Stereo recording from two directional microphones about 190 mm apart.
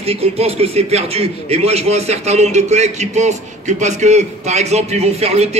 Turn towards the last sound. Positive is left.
turn(degrees=-35)  # may be behind; listen again after turning